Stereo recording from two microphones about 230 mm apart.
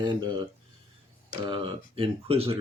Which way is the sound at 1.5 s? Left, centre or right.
Right.